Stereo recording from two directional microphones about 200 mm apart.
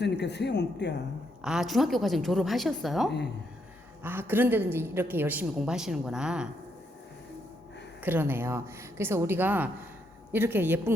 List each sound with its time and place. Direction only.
0.0 s speech: 55° left (ahead or behind)
1.4 s a woman's voice: 5° right (ahead or behind)
8.0 s a woman's voice: 10° right (ahead or behind)